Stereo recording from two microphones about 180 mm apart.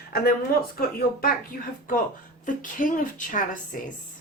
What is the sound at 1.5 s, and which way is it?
Speech, 50° left (ahead or behind).